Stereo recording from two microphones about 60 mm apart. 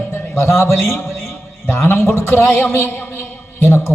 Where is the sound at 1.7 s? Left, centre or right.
Left.